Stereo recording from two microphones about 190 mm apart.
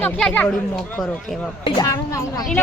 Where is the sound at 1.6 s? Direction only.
30° left (ahead or behind).